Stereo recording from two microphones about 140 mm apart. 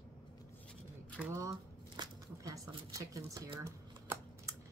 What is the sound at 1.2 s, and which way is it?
Speech, 20° right (ahead or behind).